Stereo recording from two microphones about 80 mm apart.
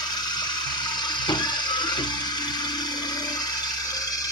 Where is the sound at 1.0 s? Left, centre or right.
Left.